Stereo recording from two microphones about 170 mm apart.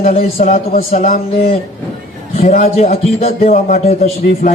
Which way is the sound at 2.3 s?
55° left (ahead or behind).